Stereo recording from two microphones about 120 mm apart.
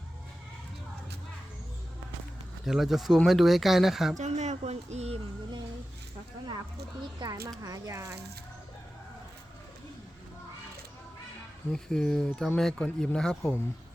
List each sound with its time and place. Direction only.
2.6 s speech: centre (ahead or behind)
4.2 s speech: 75° right (ahead or behind)
7.2 s speech: 35° right (ahead or behind)
11.7 s speech: 5° left (ahead or behind)